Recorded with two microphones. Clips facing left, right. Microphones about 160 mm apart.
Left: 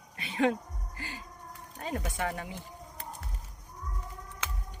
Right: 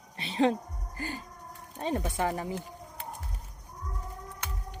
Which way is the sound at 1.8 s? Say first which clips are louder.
Right 4 dB; 30° right (ahead or behind).